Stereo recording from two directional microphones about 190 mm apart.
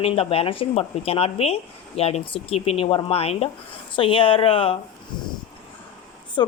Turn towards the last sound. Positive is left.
turn(degrees=25)  # may be behind; listen again after turning